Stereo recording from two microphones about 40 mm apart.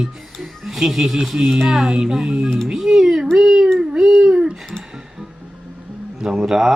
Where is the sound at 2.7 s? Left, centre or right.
Centre.